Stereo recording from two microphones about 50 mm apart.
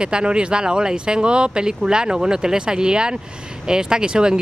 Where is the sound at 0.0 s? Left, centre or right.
Centre.